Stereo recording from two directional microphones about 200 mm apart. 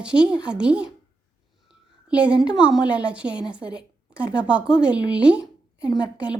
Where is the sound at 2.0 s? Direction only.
5° right (ahead or behind).